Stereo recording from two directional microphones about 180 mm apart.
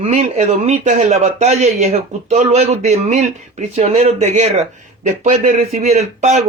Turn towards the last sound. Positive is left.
turn(degrees=-40)  # may be behind; listen again after turning